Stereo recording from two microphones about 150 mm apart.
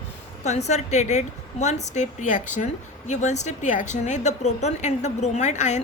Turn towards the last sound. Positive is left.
turn(degrees=50)  # may be behind; listen again after turning